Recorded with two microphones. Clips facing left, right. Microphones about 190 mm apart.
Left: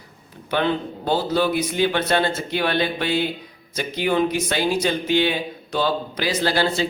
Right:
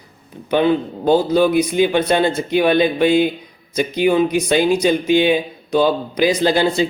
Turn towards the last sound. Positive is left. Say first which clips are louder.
# right 5 dB
turn(degrees=-15)  # may be behind; listen again after turning